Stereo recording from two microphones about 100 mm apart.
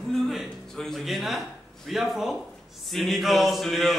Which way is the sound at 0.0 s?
5° left (ahead or behind).